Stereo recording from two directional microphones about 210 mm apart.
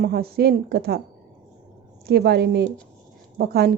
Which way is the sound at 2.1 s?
50° right (ahead or behind).